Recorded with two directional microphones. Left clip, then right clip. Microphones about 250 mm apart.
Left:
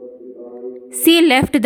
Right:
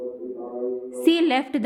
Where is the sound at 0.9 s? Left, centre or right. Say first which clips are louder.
Left 8 dB; left.